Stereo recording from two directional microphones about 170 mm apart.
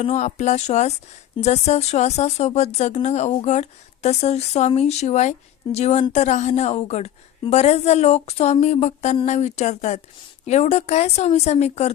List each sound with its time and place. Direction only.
0.0 s speech: 45° left (ahead or behind)